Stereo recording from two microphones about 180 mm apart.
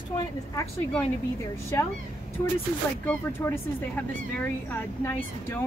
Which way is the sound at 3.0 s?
10° left (ahead or behind).